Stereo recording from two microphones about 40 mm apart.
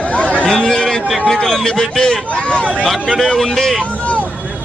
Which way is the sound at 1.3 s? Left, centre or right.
Centre.